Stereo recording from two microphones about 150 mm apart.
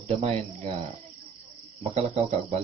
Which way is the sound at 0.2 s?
40° right (ahead or behind).